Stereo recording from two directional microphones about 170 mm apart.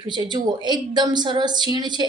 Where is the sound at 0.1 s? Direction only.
25° right (ahead or behind).